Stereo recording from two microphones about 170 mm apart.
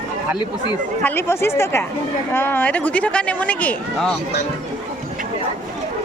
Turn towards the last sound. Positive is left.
turn(degrees=5)  # may be behind; listen again after turning